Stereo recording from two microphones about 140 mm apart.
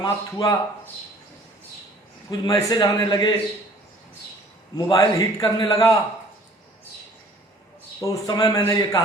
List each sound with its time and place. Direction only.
0.0 s a man's voice: 25° left (ahead or behind)
2.4 s a man's voice: 25° left (ahead or behind)
4.9 s a man's voice: 25° left (ahead or behind)
8.0 s a man's voice: 25° left (ahead or behind)